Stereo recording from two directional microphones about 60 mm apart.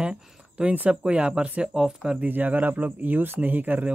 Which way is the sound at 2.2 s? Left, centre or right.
Right.